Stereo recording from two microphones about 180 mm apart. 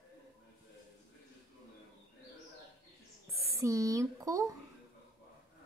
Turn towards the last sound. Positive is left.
turn(degrees=-15)  # may be behind; listen again after turning